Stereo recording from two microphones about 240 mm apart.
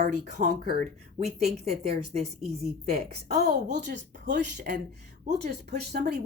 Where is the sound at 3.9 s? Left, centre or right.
Right.